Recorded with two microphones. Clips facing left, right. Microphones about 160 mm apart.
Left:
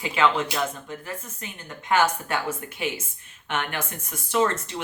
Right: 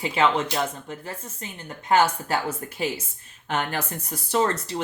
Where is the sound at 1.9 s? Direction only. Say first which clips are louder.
Right 2 dB; 35° right (ahead or behind).